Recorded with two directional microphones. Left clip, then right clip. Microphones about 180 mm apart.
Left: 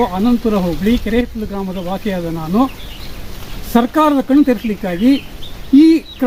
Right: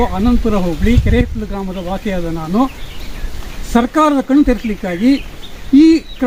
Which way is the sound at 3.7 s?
Centre (ahead or behind).